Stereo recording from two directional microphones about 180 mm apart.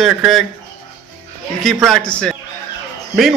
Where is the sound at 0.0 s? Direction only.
Centre (ahead or behind).